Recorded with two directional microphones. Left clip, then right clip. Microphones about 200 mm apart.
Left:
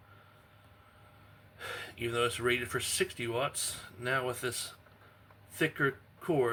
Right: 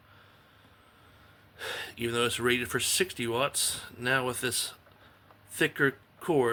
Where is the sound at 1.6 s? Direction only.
55° right (ahead or behind).